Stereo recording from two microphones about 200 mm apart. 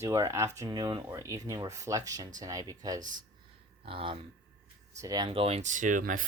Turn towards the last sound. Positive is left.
turn(degrees=-40)  # may be behind; listen again after turning